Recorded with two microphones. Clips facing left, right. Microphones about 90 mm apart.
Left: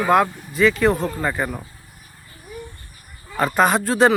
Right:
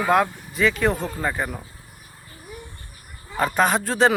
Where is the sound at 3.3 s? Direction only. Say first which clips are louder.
Left 2 dB; centre (ahead or behind).